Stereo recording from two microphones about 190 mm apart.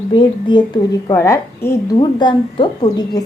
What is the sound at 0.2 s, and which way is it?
A woman's voice, 25° left (ahead or behind).